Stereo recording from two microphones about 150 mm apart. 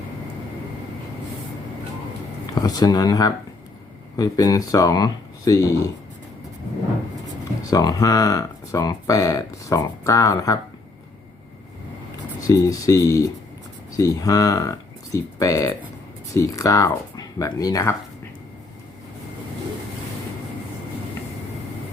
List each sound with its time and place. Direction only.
2.6 s speech: 25° left (ahead or behind)
7.7 s speech: 25° left (ahead or behind)
12.5 s speech: 20° left (ahead or behind)